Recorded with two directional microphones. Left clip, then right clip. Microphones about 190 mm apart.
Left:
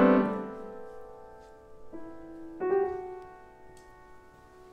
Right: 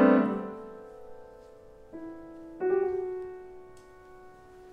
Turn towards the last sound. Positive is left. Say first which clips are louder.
# right 6 dB
turn(degrees=15)  # may be behind; listen again after turning